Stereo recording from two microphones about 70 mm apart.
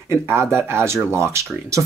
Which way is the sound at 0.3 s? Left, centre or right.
Right.